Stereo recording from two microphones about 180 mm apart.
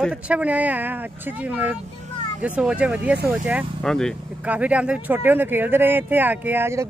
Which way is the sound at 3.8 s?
5° left (ahead or behind).